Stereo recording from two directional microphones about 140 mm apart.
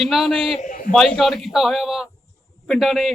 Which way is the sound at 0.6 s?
70° left (ahead or behind).